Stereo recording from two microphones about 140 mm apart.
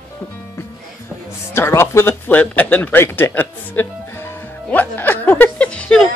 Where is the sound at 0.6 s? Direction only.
15° left (ahead or behind).